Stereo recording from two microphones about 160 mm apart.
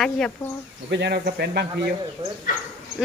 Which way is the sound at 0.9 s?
85° right.